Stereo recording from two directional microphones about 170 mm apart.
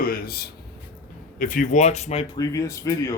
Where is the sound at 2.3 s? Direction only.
20° left (ahead or behind).